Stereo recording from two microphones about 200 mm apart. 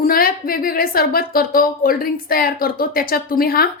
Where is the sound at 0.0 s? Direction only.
45° left (ahead or behind).